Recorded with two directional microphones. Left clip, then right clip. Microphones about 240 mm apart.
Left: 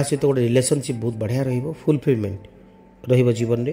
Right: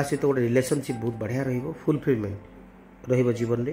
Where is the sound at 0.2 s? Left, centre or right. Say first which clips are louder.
Left 4 dB; left.